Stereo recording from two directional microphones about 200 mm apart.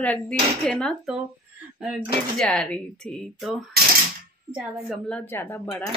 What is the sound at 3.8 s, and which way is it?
Typewriter, 50° right (ahead or behind).